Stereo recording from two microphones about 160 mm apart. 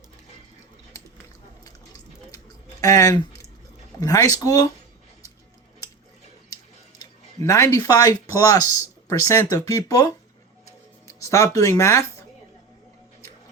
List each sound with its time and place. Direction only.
2.8 s speech: 20° left (ahead or behind)
7.0 s speech: 20° left (ahead or behind)
11.3 s speech: 20° left (ahead or behind)